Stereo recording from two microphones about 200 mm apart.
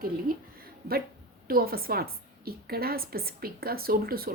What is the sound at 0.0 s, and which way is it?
A woman's voice, 50° right (ahead or behind).